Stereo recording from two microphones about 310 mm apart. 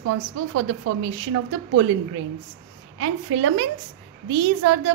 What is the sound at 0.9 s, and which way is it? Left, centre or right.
Speech, right.